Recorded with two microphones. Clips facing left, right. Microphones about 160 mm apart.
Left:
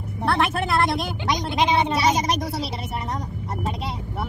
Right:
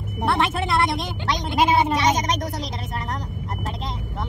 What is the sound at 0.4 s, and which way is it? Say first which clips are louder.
A woman's voice: left 1 dB; centre (ahead or behind).